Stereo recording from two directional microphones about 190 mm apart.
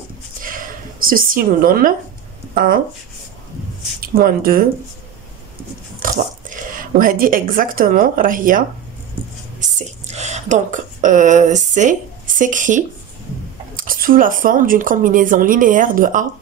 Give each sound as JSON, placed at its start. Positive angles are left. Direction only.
{"t": 0.4, "sound": "a sound", "side_deg": -45}
{"t": 2.5, "sound": "speech", "side_deg": -45}
{"t": 4.0, "sound": "speech", "side_deg": -50}
{"t": 5.9, "sound": "speech", "side_deg": -45}
{"t": 9.6, "sound": "a sound", "side_deg": -35}
{"t": 13.7, "sound": "speech", "side_deg": -50}